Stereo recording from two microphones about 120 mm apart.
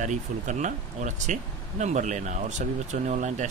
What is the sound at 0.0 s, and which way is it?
Speech, 90° right.